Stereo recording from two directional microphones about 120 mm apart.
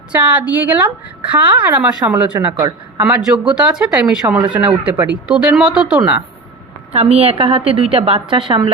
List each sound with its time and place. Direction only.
0.1 s a woman's voice: 15° right (ahead or behind)
6.9 s a woman's voice: 60° right (ahead or behind); by 8.7 s 45° right (ahead or behind)